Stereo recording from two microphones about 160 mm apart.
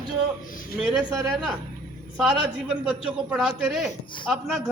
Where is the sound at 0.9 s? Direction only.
20° right (ahead or behind).